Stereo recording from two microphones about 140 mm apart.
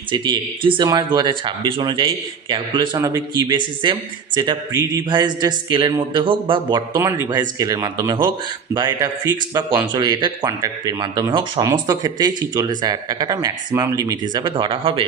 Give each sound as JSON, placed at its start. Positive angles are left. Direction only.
{"t": 0.1, "sound": "speech", "side_deg": -35}